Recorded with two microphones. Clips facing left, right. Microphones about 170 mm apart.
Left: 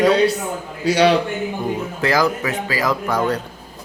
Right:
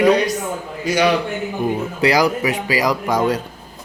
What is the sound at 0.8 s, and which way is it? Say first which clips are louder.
Speech: left 2 dB; 30° left (ahead or behind).